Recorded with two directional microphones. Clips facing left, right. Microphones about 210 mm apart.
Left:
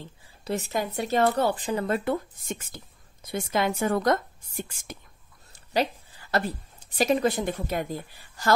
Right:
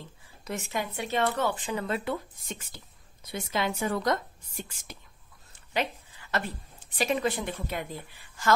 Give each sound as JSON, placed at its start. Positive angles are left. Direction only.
{"t": 0.5, "sound": "speech", "side_deg": 35}
{"t": 5.5, "sound": "a woman's voice", "side_deg": 35}